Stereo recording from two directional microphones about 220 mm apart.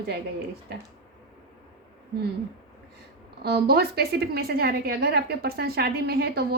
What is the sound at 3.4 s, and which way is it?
A woman's voice, 45° right (ahead or behind).